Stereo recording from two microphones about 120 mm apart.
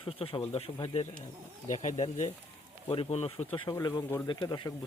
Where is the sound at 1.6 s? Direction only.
80° left.